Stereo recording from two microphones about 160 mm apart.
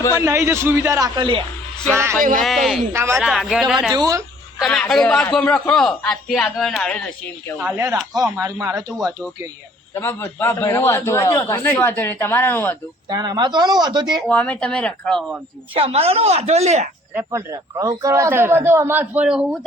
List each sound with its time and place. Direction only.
0.1 s a man's voice: 20° right (ahead or behind)
1.9 s a man's voice: 15° right (ahead or behind)
2.4 s a man's voice: centre (ahead or behind)
2.9 s a man's voice: 15° right (ahead or behind)
3.2 s a man's voice: centre (ahead or behind)
3.9 s a man's voice: 25° right (ahead or behind)
4.6 s a man's voice: centre (ahead or behind)
7.8 s a man's voice: 20° right (ahead or behind)
9.9 s a man's voice: 15° left (ahead or behind)
13.1 s a man's voice: 25° right (ahead or behind)
14.3 s a man's voice: 10° left (ahead or behind)
15.7 s a woman's voice: 35° right (ahead or behind)
17.2 s a man's voice: 20° right (ahead or behind)